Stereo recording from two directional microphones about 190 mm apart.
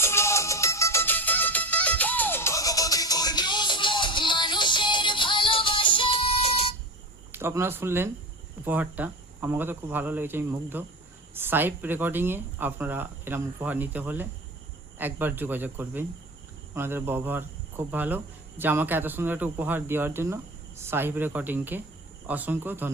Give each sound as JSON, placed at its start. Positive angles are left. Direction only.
{"t": 0.0, "sound": "music", "side_deg": 15}
{"t": 7.3, "sound": "speech", "side_deg": -10}